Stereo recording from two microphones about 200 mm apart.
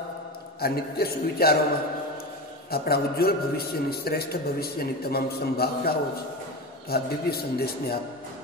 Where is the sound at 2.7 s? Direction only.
50° left (ahead or behind).